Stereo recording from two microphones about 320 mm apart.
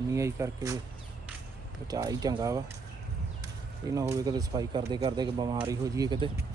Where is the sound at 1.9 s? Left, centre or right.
Centre.